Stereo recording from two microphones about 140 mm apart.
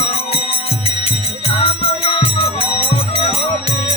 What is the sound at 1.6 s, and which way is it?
Music, 40° left (ahead or behind).